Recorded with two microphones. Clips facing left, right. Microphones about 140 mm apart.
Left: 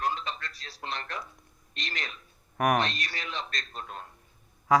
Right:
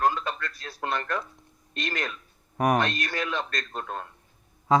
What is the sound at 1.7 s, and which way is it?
A man's voice, 50° right (ahead or behind).